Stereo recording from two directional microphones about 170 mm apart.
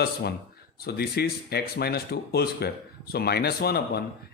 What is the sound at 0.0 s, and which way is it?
Speech, 70° left (ahead or behind).